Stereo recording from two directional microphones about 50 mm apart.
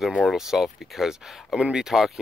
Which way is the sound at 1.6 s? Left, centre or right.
Centre.